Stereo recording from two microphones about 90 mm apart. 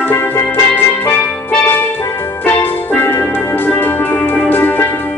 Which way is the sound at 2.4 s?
20° left (ahead or behind).